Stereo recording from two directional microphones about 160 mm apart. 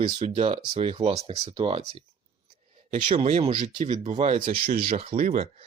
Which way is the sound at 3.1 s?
40° right (ahead or behind).